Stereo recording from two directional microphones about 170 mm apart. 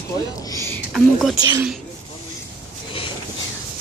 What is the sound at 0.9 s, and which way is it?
Speech, centre (ahead or behind).